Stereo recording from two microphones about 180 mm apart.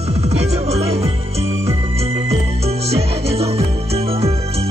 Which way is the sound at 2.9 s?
35° right (ahead or behind).